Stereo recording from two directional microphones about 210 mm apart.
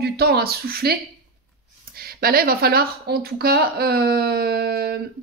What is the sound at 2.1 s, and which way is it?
Speech, 45° right (ahead or behind).